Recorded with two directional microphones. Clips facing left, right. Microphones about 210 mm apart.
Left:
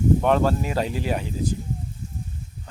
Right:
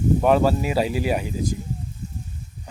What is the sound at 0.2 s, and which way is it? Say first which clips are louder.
Speech: right 2 dB; 5° right (ahead or behind).